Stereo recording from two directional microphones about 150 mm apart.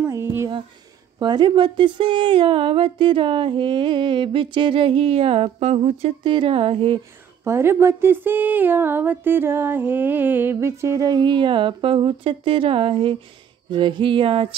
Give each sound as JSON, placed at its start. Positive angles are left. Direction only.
{"t": 0.1, "sound": "a sound", "side_deg": -15}
{"t": 1.2, "sound": "speech", "side_deg": -30}
{"t": 7.4, "sound": "speech", "side_deg": -15}